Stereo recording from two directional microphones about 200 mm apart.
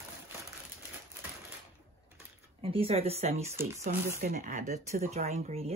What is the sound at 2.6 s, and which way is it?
Speech, 30° right (ahead or behind).